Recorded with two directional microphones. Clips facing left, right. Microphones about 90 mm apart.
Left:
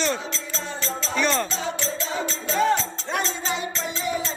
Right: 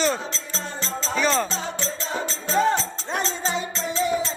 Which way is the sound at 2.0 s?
30° right (ahead or behind).